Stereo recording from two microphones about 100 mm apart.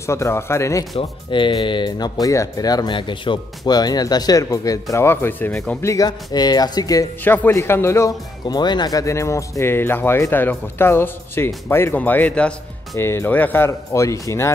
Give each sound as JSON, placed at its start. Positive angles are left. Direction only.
{"t": 0.0, "sound": "speech", "side_deg": 30}
{"t": 0.9, "sound": "speech", "side_deg": 60}
{"t": 4.9, "sound": "speech", "side_deg": 25}
{"t": 6.0, "sound": "speech", "side_deg": 45}
{"t": 7.2, "sound": "speech", "side_deg": 20}
{"t": 8.5, "sound": "speech", "side_deg": 45}
{"t": 12.9, "sound": "speech", "side_deg": 25}
{"t": 13.7, "sound": "speech", "side_deg": 30}